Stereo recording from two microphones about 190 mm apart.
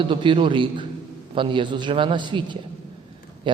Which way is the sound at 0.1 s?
25° right (ahead or behind).